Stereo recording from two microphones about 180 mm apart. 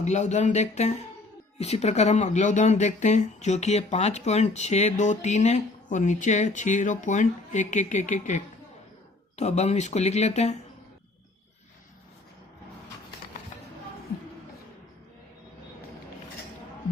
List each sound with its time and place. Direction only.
0.0 s speech: 40° left (ahead or behind)